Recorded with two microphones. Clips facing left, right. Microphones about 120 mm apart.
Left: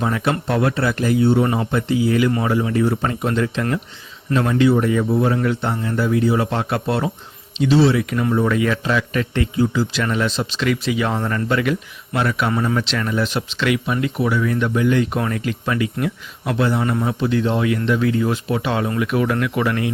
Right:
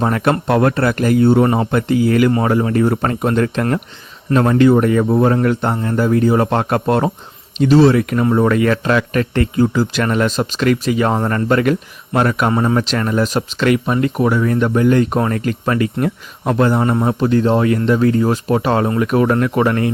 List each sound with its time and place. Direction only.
0.0 s speech: 55° right (ahead or behind)